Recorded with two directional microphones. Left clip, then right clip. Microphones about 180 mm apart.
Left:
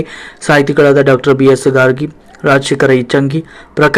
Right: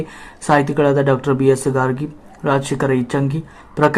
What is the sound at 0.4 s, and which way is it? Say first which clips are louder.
Speech: left 7 dB; 10° left (ahead or behind).